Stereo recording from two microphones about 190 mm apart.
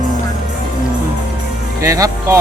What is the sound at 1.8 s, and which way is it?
Speech, 15° right (ahead or behind).